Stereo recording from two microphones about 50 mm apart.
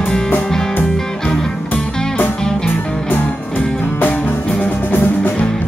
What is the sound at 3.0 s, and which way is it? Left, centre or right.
Music, left.